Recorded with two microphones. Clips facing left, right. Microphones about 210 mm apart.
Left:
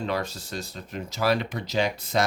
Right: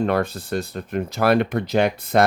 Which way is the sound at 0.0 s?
55° right (ahead or behind).